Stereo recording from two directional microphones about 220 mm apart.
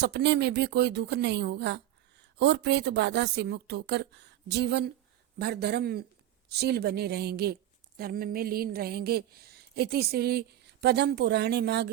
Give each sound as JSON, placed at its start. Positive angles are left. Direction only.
{"t": 0.0, "sound": "speech", "side_deg": -50}